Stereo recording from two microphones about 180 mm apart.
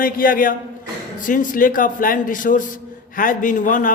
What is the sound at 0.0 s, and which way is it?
A man's voice, 50° left (ahead or behind).